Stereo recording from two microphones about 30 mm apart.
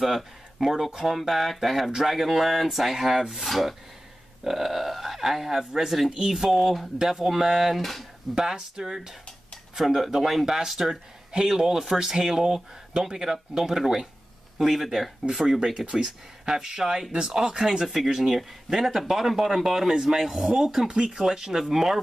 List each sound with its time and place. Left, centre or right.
0.0 s speech: centre
7.8 s speech: centre
8.4 s speech: right
8.8 s speech: centre
10.4 s speech: centre
10.7 s speech: centre
15.7 s speech: right